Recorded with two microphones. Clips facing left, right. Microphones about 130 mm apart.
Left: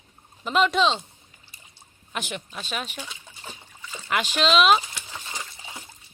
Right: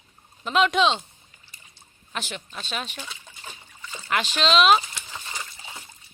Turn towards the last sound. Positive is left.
turn(degrees=20)  # may be behind; listen again after turning